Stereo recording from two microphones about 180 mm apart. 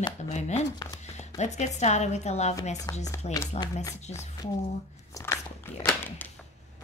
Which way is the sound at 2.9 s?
20° left (ahead or behind).